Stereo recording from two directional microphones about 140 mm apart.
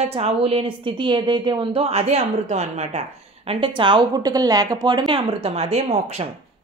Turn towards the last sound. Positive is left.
turn(degrees=-50)  # may be behind; listen again after turning